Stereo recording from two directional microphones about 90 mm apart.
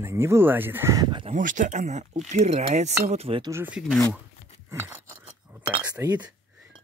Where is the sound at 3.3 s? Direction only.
90° right.